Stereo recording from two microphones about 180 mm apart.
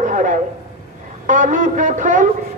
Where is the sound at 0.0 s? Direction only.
45° right (ahead or behind).